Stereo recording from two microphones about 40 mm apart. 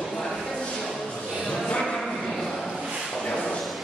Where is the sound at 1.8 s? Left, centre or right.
Centre.